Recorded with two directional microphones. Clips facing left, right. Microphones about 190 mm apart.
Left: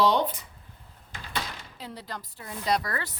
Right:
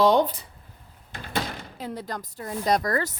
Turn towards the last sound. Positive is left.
turn(degrees=-45)  # may be behind; listen again after turning